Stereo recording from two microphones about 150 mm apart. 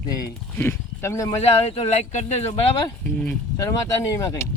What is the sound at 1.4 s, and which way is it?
Speech, 40° left (ahead or behind).